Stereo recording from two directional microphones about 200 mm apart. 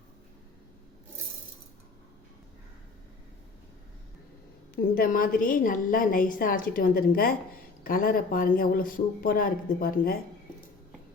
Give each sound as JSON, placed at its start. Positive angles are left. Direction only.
{"t": 4.7, "sound": "a woman's voice", "side_deg": 45}